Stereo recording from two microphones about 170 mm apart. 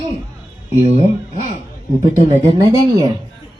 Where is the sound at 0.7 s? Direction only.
40° right (ahead or behind).